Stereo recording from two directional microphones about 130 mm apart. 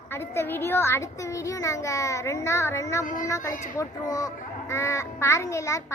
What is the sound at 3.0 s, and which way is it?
Speech, 85° left.